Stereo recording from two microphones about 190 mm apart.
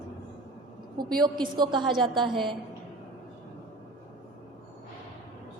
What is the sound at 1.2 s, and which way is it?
A man's voice, 25° right (ahead or behind).